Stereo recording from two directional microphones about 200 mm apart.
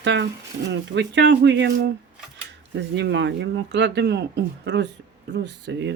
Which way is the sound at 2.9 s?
60° right (ahead or behind).